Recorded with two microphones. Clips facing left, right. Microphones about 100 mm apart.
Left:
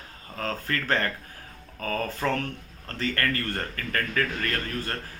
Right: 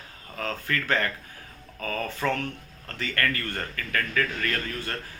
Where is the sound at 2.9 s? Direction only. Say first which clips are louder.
Left 1 dB; 35° left (ahead or behind).